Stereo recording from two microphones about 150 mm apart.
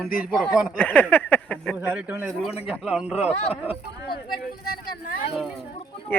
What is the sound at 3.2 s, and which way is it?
Speech, 40° left (ahead or behind).